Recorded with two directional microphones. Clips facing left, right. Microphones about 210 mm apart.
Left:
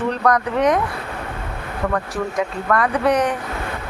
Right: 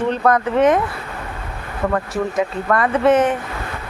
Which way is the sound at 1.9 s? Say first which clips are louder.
Right 3 dB; centre (ahead or behind).